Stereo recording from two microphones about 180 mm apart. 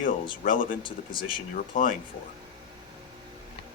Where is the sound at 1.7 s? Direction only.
50° left (ahead or behind).